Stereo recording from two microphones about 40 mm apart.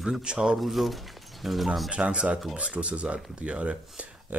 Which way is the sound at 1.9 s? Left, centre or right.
Right.